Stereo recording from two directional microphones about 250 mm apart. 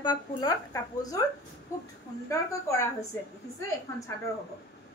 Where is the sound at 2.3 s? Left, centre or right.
Centre.